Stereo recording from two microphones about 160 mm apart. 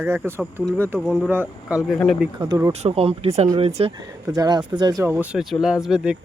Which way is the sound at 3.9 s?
25° right (ahead or behind).